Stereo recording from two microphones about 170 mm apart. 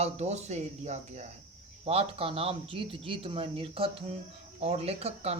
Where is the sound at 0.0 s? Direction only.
40° right (ahead or behind).